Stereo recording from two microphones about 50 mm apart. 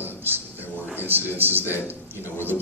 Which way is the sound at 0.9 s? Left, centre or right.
Right.